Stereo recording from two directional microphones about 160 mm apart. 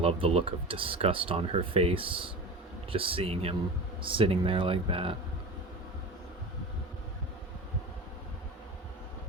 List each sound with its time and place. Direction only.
0.0 s speech: 40° right (ahead or behind)